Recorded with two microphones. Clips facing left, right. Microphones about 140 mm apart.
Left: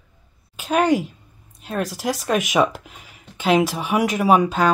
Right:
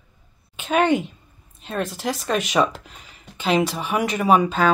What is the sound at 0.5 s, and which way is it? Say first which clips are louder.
Speech: left 1 dB; 5° left (ahead or behind).